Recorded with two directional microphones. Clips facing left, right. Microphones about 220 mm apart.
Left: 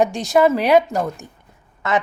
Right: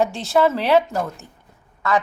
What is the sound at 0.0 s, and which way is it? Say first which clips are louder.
A woman's voice: left 2 dB; 15° left (ahead or behind).